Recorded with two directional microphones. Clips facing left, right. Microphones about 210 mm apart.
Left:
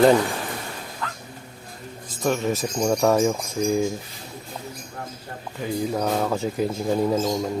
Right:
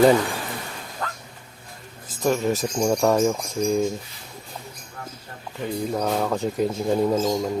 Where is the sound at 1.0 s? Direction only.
45° right (ahead or behind).